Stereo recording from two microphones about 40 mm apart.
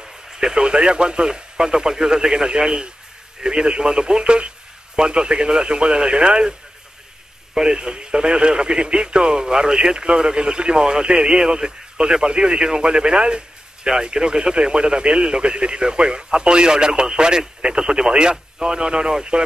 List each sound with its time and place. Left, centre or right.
0.0 s a man's voice: centre
7.5 s speech: centre